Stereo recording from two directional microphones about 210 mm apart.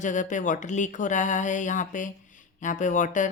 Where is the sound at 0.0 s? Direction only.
35° left (ahead or behind).